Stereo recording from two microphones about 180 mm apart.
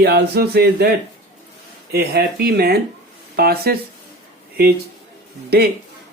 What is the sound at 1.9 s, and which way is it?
Speech, 65° right (ahead or behind).